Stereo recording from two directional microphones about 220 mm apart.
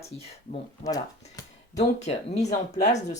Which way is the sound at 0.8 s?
30° left (ahead or behind).